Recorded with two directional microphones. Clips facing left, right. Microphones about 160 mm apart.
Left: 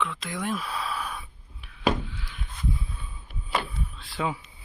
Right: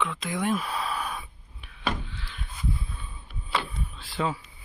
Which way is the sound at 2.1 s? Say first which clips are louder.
Even; 10° left (ahead or behind).